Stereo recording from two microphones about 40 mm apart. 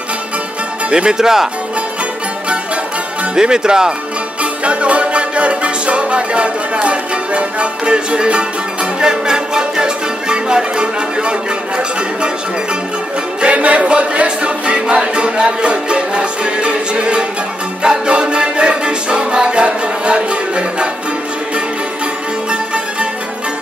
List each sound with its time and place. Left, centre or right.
0.8 s speech: right
3.3 s speech: centre
4.4 s music: right
13.4 s music: right